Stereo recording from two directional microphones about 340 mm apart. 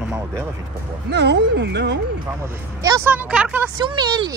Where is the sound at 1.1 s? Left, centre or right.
Right.